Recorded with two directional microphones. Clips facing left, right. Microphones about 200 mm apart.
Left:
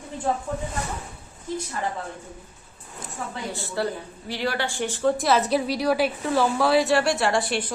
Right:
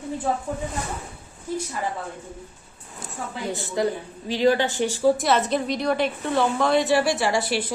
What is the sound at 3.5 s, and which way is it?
A woman's voice, 15° right (ahead or behind).